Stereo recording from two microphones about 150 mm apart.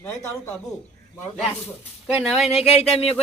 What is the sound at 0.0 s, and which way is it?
Speech, 20° left (ahead or behind).